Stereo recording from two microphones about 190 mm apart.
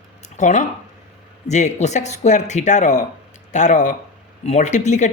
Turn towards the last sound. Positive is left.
turn(degrees=40)  # may be behind; listen again after turning